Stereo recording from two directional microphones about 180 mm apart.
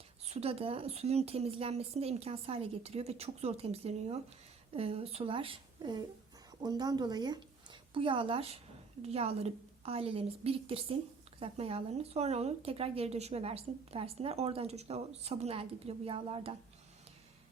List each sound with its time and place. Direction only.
0.3 s a woman's voice: 35° right (ahead or behind)